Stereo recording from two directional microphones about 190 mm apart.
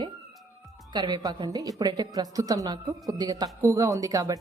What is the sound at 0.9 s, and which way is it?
A woman's voice, 20° right (ahead or behind).